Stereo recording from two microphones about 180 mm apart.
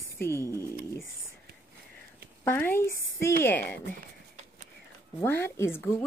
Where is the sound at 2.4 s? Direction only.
10° left (ahead or behind).